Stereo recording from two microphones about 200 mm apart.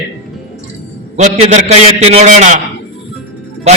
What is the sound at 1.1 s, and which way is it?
A man's voice, 35° right (ahead or behind).